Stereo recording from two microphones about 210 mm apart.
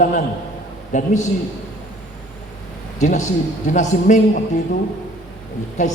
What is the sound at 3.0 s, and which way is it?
A man's voice, 35° left (ahead or behind).